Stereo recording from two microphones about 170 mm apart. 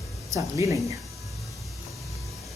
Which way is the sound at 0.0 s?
Centre (ahead or behind).